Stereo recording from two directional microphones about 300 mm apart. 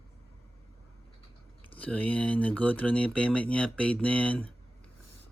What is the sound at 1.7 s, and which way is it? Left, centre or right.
Speech, centre.